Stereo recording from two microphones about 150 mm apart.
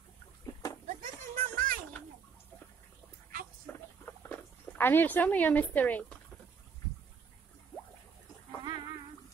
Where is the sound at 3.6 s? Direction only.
10° left (ahead or behind).